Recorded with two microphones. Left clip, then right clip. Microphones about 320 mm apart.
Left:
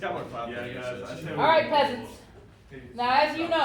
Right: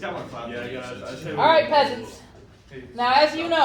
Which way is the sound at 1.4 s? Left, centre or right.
Right.